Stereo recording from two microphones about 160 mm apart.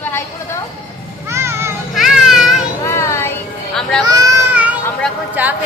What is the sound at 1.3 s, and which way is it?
Children playing, 15° right (ahead or behind).